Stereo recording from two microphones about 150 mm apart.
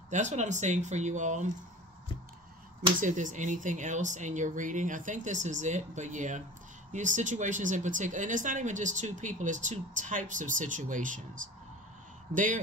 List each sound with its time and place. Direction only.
0.1 s speech: 50° right (ahead or behind)
3.0 s speech: 55° right (ahead or behind)